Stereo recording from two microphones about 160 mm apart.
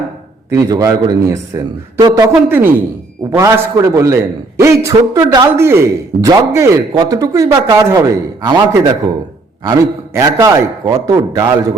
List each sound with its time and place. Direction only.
0.5 s a man's voice: 20° right (ahead or behind)
2.3 s a man's voice: 10° right (ahead or behind)
10.2 s a man's voice: 20° right (ahead or behind)